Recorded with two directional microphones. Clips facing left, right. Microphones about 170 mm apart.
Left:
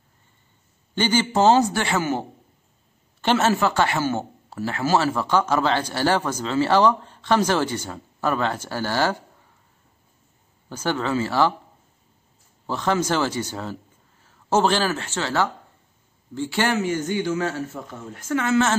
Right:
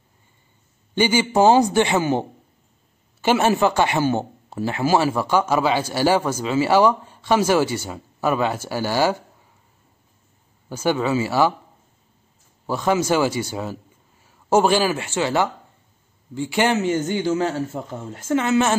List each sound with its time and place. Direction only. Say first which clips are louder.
0.9 s a man's voice: right 3 dB; 15° right (ahead or behind)
10.7 s a man's voice: right 3 dB; 10° right (ahead or behind)
12.6 s a man's voice: right 3 dB; 10° right (ahead or behind)